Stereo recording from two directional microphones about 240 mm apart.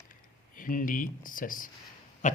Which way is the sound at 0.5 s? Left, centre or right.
Left.